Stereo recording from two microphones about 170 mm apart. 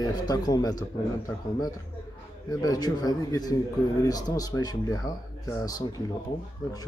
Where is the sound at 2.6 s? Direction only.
20° left (ahead or behind).